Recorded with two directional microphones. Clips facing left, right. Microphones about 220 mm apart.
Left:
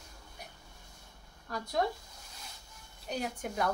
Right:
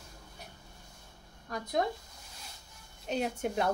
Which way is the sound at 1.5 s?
20° right (ahead or behind).